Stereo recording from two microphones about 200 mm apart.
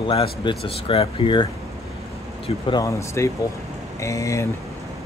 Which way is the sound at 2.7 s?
15° left (ahead or behind).